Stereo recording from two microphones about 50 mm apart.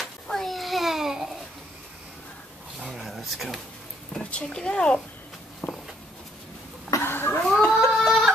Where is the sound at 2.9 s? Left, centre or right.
Centre.